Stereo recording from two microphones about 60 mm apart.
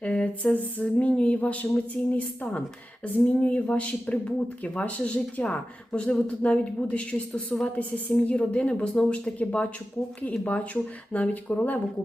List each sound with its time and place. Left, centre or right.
0.0 s a woman's voice: centre